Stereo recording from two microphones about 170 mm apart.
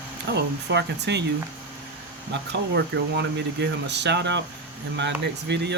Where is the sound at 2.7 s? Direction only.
85° right.